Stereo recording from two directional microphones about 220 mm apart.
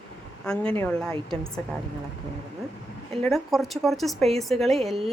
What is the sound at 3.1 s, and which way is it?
A woman's voice, centre (ahead or behind).